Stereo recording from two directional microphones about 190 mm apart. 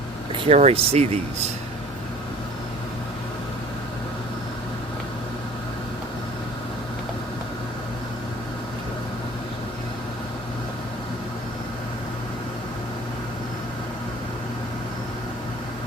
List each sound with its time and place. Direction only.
0.3 s speech: 35° right (ahead or behind)